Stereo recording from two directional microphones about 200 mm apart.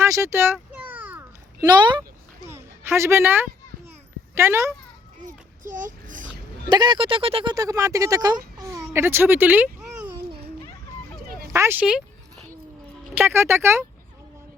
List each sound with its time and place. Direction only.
0.0 s a sound: 15° right (ahead or behind)
4.4 s speech: 15° right (ahead or behind)
5.2 s a sound: 40° right (ahead or behind)
6.7 s speech: 20° right (ahead or behind)
7.5 s speech: 15° right (ahead or behind)
11.5 s speech: 10° right (ahead or behind)
13.1 s speech: 15° right (ahead or behind)